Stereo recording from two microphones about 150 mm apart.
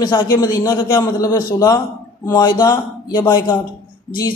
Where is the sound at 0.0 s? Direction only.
25° left (ahead or behind).